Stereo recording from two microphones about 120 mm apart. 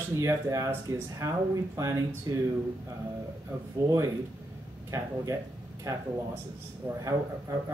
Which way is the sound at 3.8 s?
25° right (ahead or behind).